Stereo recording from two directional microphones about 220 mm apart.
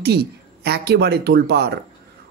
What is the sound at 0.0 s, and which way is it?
Speech, 45° right (ahead or behind).